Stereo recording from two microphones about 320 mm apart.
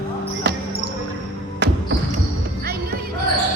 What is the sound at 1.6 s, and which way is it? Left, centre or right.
Basketball bounce, right.